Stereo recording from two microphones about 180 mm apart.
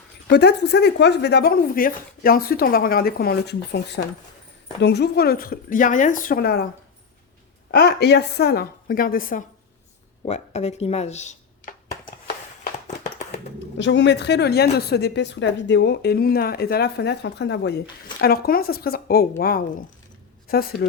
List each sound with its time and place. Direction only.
0.3 s a woman's voice: 70° left (ahead or behind)
7.7 s a woman's voice: 65° left (ahead or behind)
10.2 s speech: 35° left (ahead or behind)
13.7 s a woman's voice: 85° left; by 20.8 s 55° left (ahead or behind)